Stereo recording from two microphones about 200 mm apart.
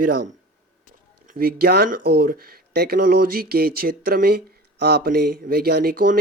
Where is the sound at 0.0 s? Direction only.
45° right (ahead or behind).